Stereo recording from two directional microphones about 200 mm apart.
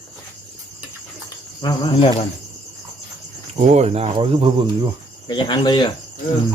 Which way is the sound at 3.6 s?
30° right (ahead or behind).